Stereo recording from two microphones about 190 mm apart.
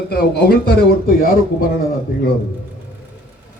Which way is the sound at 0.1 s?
55° left (ahead or behind).